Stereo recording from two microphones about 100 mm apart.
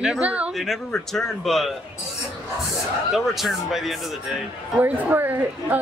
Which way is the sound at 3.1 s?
Centre (ahead or behind).